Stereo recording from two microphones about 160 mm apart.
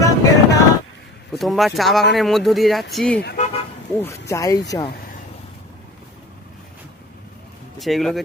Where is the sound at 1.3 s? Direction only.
Centre (ahead or behind).